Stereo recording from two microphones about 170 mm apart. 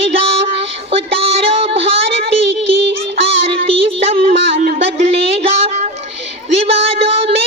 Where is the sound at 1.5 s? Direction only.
35° right (ahead or behind).